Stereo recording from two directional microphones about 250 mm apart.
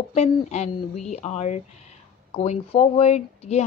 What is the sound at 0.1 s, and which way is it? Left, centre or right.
A woman's voice, left.